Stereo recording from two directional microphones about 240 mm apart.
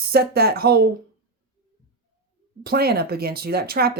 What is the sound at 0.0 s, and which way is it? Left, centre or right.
Speech, right.